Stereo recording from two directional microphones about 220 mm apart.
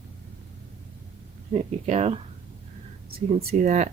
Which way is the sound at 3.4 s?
35° right (ahead or behind).